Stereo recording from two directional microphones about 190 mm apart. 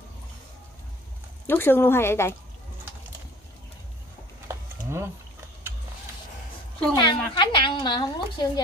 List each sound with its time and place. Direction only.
1.5 s a woman's voice: 10° left (ahead or behind)
4.5 s a sound: 15° right (ahead or behind)
7.0 s a woman's voice: 25° left (ahead or behind)